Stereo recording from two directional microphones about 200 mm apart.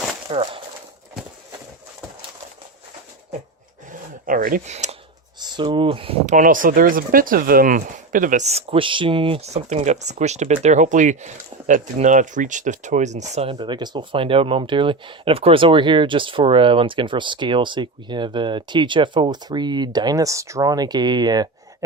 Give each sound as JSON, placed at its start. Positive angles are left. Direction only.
{"t": 0.3, "sound": "speech", "side_deg": -25}
{"t": 4.3, "sound": "speech", "side_deg": -45}
{"t": 5.4, "sound": "speech", "side_deg": -25}
{"t": 6.3, "sound": "speech", "side_deg": -40}